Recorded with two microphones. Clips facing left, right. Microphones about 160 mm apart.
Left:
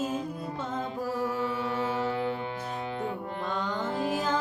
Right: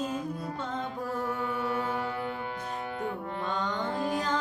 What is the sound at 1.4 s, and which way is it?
Music, 25° left (ahead or behind).